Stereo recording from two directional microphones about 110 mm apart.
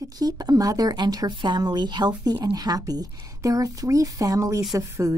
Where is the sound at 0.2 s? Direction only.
35° right (ahead or behind).